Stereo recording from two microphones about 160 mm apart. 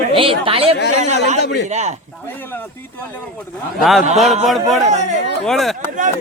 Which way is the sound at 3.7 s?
Centre (ahead or behind).